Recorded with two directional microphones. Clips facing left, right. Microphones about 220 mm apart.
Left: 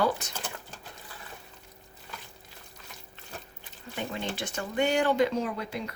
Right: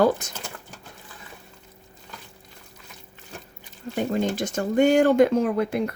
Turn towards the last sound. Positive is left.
turn(degrees=-55)  # may be behind; listen again after turning